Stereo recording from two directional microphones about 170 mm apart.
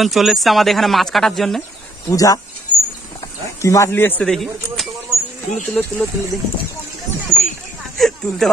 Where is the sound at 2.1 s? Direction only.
20° left (ahead or behind).